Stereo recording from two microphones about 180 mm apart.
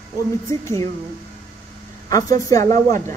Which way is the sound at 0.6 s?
15° left (ahead or behind).